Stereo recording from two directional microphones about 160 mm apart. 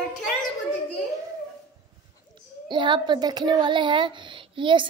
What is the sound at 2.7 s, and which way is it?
Speech, 30° right (ahead or behind).